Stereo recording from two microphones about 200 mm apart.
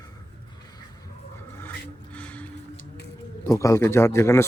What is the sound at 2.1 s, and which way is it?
Music, 5° left (ahead or behind).